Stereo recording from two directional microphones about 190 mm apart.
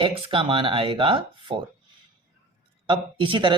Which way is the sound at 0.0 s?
25° right (ahead or behind).